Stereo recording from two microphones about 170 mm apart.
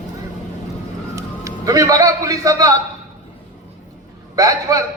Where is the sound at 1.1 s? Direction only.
20° right (ahead or behind).